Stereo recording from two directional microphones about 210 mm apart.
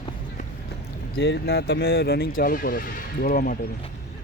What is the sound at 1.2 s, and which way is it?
Speech, 55° left (ahead or behind).